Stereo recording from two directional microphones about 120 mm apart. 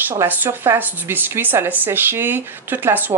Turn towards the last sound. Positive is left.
turn(degrees=-15)  # may be behind; listen again after turning